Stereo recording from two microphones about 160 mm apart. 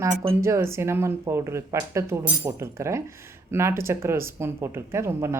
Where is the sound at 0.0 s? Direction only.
15° right (ahead or behind).